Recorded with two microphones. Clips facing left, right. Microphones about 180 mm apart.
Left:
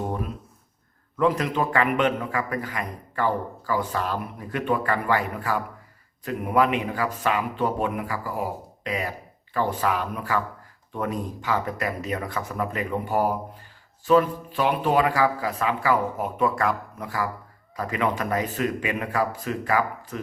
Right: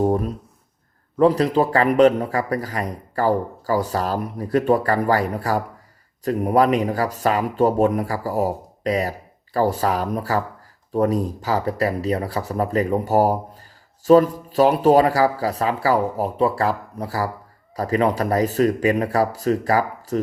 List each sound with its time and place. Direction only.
0.0 s a man's voice: 40° right (ahead or behind)